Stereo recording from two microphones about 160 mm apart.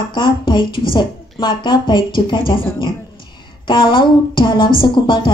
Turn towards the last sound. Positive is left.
turn(degrees=30)  # may be behind; listen again after turning